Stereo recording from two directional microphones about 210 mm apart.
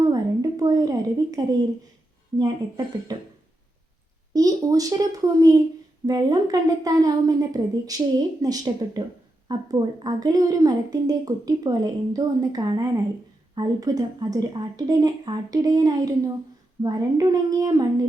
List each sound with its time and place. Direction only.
0.0 s a sound: 15° right (ahead or behind)
2.4 s a woman's voice: 20° right (ahead or behind)
4.4 s a woman's voice: 15° right (ahead or behind)